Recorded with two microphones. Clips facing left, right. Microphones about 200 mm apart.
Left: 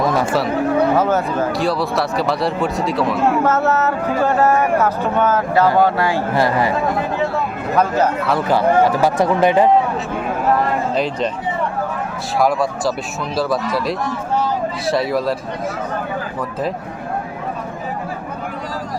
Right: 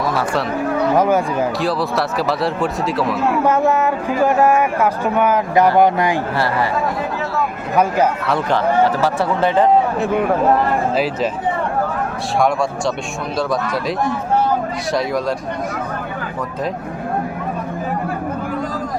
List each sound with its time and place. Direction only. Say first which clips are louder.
0.9 s speech: right 1 dB; 10° right (ahead or behind)
1.5 s speech: even; centre (ahead or behind)
3.4 s speech: right 1 dB; 15° right (ahead or behind)
6.3 s speech: left 2 dB; 15° left (ahead or behind)
7.8 s speech: right 1 dB; 10° right (ahead or behind)
8.3 s speech: left 2 dB; 5° left (ahead or behind)
10.9 s speech: right 1 dB; 5° right (ahead or behind)
12.4 s speech: left 1 dB; centre (ahead or behind)
14.9 s speech: even; 5° left (ahead or behind)